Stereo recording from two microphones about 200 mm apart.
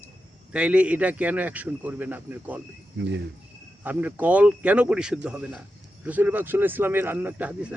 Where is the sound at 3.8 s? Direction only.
10° right (ahead or behind).